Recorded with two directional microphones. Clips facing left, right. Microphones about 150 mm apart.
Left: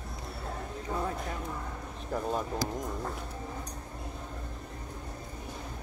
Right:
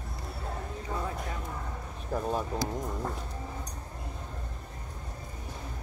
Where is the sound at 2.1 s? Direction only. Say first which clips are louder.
Right 1 dB; 5° right (ahead or behind).